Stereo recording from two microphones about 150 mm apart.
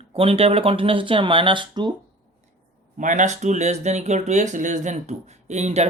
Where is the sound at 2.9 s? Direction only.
55° right (ahead or behind).